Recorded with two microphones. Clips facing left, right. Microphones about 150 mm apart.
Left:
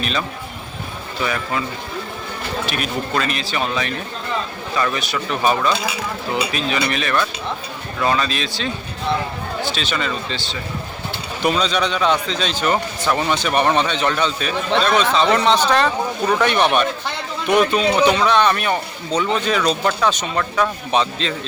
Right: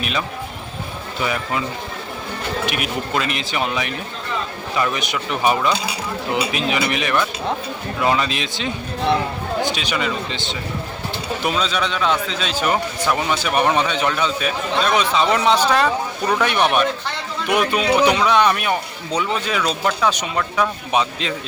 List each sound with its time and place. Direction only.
1.2 s a man's voice: 20° right (ahead or behind)
2.6 s a man's voice: 15° right (ahead or behind)
11.4 s a man's voice: 5° right (ahead or behind)